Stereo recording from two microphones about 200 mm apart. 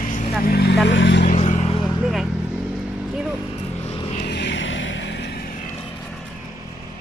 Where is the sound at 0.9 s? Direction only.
65° left (ahead or behind).